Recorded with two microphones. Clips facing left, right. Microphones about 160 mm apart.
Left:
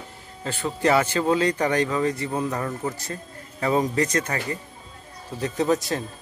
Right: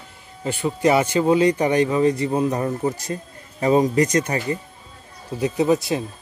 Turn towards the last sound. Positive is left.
turn(degrees=-10)  # may be behind; listen again after turning